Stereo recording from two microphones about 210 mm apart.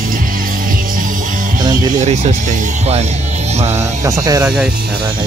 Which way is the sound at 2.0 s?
35° right (ahead or behind).